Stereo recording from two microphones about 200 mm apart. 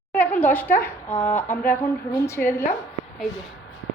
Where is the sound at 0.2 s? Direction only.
10° left (ahead or behind).